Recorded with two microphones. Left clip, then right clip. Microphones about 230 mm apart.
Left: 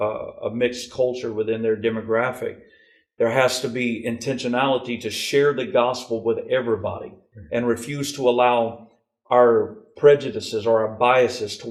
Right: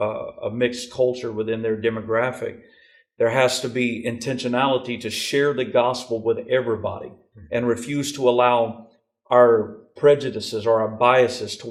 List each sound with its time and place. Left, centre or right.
0.0 s speech: left
9.9 s speech: left